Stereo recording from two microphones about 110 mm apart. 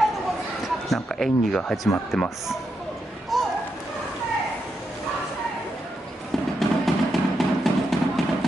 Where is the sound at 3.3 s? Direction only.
Centre (ahead or behind).